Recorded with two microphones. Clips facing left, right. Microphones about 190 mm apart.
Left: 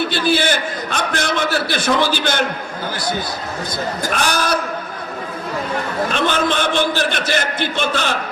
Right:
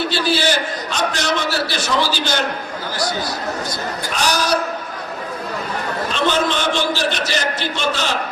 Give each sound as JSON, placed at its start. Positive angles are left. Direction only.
{"t": 0.1, "sound": "a man's voice", "side_deg": 55}
{"t": 4.1, "sound": "a man's voice", "side_deg": 55}
{"t": 6.1, "sound": "a man's voice", "side_deg": 55}